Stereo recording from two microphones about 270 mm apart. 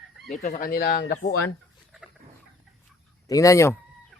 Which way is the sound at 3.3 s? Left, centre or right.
Centre.